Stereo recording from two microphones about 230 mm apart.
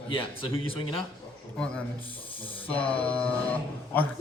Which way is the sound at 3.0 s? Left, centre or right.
Centre.